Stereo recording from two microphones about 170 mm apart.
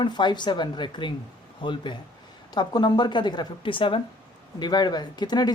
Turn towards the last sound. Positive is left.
turn(degrees=25)  # may be behind; listen again after turning